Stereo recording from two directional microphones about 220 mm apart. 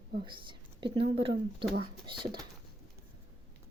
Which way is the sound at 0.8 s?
25° right (ahead or behind).